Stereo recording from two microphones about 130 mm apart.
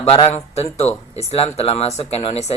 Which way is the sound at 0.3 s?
55° left (ahead or behind).